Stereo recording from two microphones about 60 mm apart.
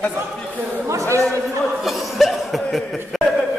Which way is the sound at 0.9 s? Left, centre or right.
Right.